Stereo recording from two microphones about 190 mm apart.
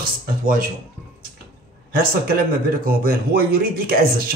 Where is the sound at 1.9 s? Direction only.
50° right (ahead or behind).